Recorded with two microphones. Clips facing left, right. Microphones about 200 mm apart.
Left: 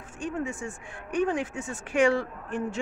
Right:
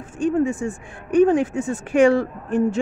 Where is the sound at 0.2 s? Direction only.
40° right (ahead or behind).